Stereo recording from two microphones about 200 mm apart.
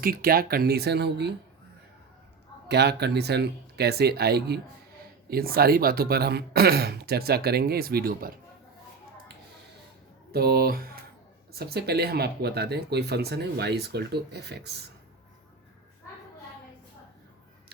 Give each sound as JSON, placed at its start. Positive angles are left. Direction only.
{"t": 0.0, "sound": "speech", "side_deg": -45}
{"t": 2.6, "sound": "speech", "side_deg": -55}
{"t": 10.3, "sound": "speech", "side_deg": -50}